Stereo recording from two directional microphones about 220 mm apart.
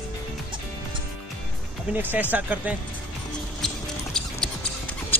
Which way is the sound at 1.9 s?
10° right (ahead or behind).